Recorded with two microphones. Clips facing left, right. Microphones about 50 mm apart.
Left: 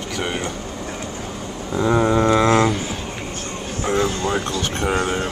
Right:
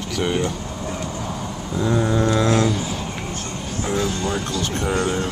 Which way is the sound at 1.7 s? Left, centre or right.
Left.